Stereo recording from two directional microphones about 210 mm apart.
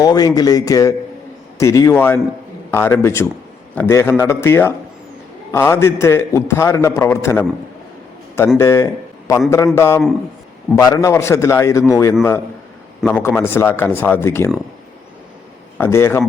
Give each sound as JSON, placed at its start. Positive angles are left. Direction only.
{"t": 0.0, "sound": "a man's voice", "side_deg": 20}
{"t": 8.5, "sound": "a man's voice", "side_deg": 10}
{"t": 15.8, "sound": "a man's voice", "side_deg": 10}